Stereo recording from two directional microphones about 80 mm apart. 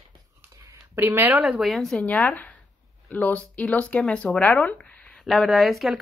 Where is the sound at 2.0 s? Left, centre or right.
Centre.